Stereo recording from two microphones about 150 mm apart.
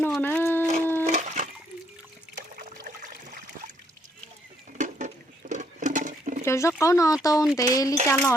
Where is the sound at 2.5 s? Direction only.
65° right (ahead or behind).